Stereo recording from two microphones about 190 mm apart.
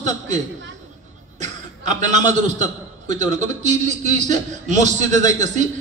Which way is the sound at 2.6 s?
40° right (ahead or behind).